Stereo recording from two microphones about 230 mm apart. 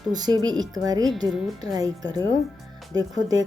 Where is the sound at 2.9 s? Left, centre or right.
Centre.